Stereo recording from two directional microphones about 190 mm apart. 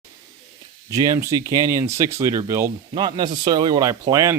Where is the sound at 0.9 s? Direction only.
15° right (ahead or behind).